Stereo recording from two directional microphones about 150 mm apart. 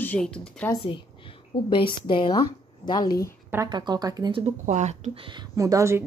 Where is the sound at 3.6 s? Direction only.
30° right (ahead or behind).